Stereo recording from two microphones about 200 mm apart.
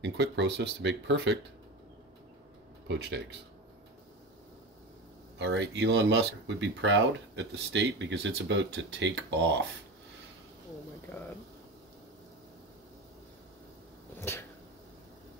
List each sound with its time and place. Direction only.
0.0 s speech: 60° right (ahead or behind)
2.9 s speech: 60° right (ahead or behind)
5.4 s speech: 65° right (ahead or behind)
11.1 s speech: 15° left (ahead or behind)